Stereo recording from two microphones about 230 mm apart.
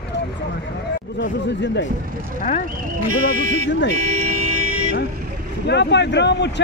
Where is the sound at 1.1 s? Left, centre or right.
Left.